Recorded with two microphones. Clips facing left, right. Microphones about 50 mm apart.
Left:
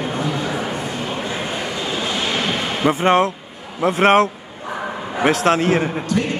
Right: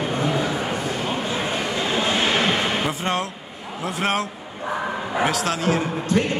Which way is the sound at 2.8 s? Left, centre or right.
Left.